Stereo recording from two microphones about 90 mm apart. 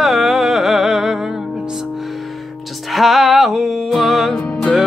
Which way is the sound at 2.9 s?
Centre (ahead or behind).